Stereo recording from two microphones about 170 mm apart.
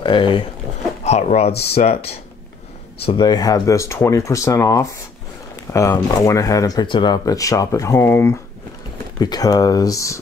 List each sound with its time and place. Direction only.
0.0 s speech: 30° left (ahead or behind)